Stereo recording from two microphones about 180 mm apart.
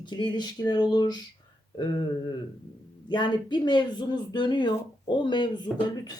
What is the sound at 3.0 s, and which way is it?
Speech, 25° left (ahead or behind).